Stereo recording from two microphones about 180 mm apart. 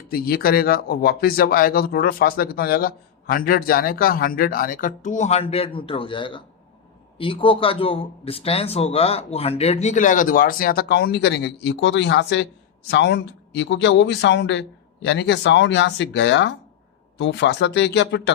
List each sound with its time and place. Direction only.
0.1 s speech: 55° left (ahead or behind); by 18.2 s 75° left (ahead or behind)